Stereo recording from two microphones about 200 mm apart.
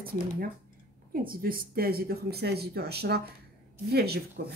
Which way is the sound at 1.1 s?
45° right (ahead or behind).